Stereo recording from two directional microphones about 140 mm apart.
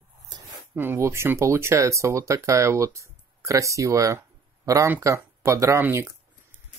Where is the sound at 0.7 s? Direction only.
15° right (ahead or behind).